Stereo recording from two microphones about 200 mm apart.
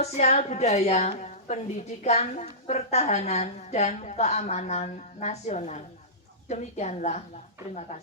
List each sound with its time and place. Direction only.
0.0 s a woman's voice: 35° left (ahead or behind)